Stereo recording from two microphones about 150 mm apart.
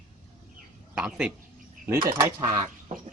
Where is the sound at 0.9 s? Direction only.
5° right (ahead or behind).